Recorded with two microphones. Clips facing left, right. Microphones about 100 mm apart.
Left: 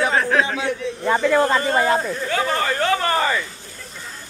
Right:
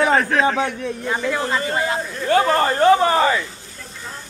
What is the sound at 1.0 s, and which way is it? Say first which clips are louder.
Speech: left 6 dB; 50° left (ahead or behind).